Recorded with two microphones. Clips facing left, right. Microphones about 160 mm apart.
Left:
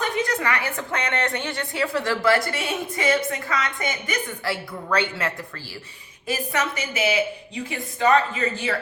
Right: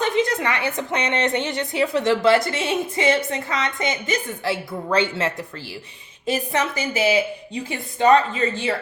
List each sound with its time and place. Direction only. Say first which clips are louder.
0.0 s a woman's voice: right 4 dB; 20° right (ahead or behind)